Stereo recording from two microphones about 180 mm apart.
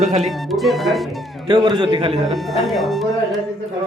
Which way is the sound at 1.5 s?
25° right (ahead or behind).